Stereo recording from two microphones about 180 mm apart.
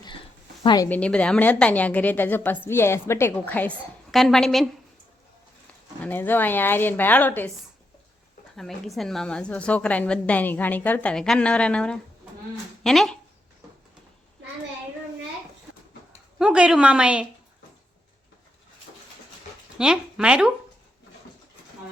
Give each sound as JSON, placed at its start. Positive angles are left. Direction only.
{"t": 0.6, "sound": "a woman's voice", "side_deg": 25}
{"t": 0.9, "sound": "a woman's voice", "side_deg": 5}
{"t": 6.0, "sound": "a woman's voice", "side_deg": 10}
{"t": 8.5, "sound": "a woman's voice", "side_deg": 0}
{"t": 16.4, "sound": "a woman's voice", "side_deg": -5}
{"t": 19.7, "sound": "speech", "side_deg": -5}